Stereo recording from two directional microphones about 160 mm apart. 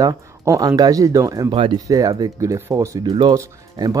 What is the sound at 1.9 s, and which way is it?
Speech, 20° right (ahead or behind).